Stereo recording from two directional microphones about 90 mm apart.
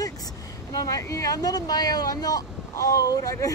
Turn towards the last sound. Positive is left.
turn(degrees=40)  # may be behind; listen again after turning